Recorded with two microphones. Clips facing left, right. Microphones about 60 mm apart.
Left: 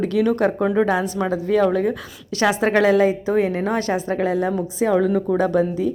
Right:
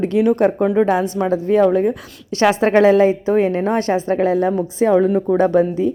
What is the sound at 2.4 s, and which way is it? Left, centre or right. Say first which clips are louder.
Speech: right 4 dB; right.